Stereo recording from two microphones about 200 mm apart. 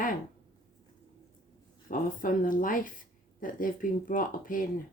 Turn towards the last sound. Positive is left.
turn(degrees=45)  # may be behind; listen again after turning